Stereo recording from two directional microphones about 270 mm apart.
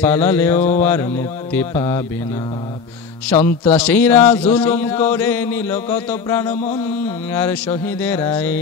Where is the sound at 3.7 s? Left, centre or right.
Centre.